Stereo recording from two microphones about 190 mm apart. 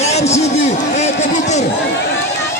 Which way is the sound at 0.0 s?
35° left (ahead or behind).